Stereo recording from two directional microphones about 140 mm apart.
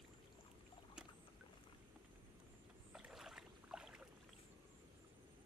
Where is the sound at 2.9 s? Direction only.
5° right (ahead or behind).